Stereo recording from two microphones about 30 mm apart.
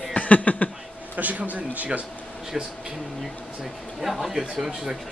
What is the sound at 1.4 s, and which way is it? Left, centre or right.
Speech, right.